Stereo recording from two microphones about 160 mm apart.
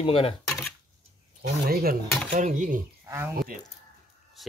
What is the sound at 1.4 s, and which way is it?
Speech, 70° right (ahead or behind).